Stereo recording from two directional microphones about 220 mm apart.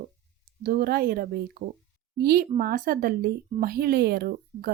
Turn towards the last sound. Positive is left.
turn(degrees=-45)  # may be behind; listen again after turning